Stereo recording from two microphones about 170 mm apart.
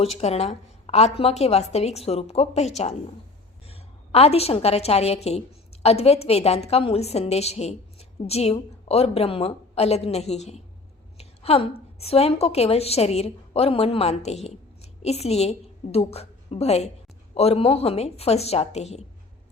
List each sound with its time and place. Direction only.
0.0 s a woman's voice: 40° left (ahead or behind)